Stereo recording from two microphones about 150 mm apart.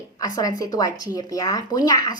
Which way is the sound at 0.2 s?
25° left (ahead or behind).